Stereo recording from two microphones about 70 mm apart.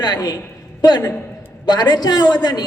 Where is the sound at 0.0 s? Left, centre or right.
Left.